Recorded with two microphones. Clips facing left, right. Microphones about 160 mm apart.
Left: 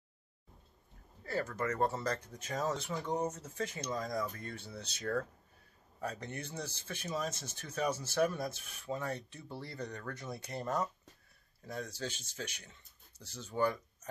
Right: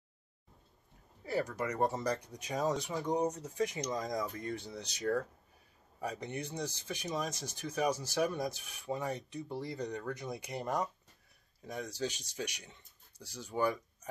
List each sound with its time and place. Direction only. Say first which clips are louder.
1.2 s speech: right 1 dB; 15° right (ahead or behind)